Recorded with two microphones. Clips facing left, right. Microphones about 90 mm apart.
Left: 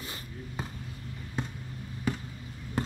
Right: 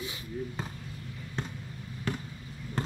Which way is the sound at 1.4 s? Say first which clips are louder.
Left 2 dB; 10° left (ahead or behind).